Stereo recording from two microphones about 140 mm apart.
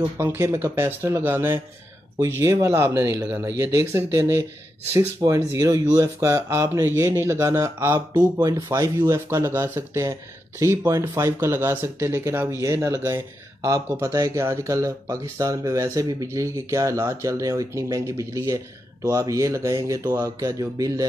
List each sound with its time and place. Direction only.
0.2 s speech: 20° right (ahead or behind)